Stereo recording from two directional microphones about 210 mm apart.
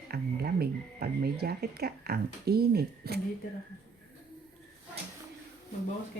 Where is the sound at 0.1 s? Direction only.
50° right (ahead or behind).